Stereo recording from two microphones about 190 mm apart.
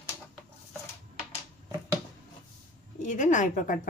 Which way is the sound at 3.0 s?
40° left (ahead or behind).